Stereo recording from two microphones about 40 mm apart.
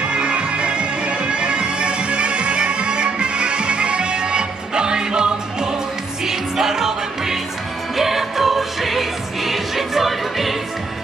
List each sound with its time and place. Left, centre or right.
0.1 s music: right; by 10.5 s centre